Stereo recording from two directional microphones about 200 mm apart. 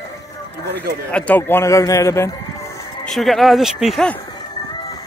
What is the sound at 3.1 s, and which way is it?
Speech, centre (ahead or behind).